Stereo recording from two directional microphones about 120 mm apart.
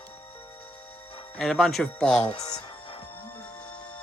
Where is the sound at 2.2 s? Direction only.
60° left (ahead or behind).